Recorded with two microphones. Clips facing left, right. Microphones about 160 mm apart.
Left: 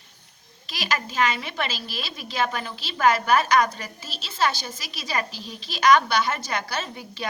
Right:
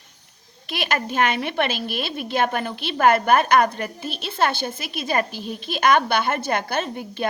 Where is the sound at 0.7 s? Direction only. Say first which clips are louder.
Right 4 dB; 55° right (ahead or behind).